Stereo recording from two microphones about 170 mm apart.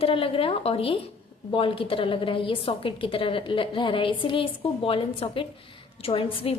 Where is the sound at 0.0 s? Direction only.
35° left (ahead or behind).